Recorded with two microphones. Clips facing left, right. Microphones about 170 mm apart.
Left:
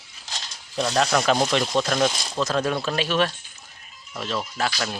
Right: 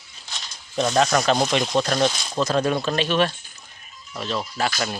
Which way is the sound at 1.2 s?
5° left (ahead or behind).